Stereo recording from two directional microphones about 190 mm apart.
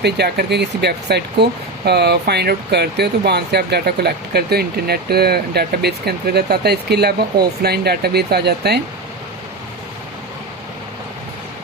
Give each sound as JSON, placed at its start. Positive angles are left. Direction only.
{"t": 0.0, "sound": "speech", "side_deg": -60}